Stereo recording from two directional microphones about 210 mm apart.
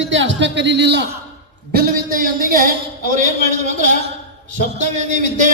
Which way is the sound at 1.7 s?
45° right (ahead or behind).